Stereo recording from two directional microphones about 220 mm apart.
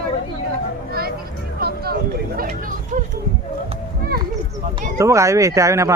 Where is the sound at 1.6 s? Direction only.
45° right (ahead or behind).